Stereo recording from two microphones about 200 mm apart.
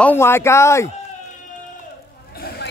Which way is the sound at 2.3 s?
50° left (ahead or behind).